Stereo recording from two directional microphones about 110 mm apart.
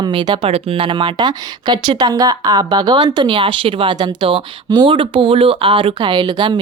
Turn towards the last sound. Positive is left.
turn(degrees=-45)  # may be behind; listen again after turning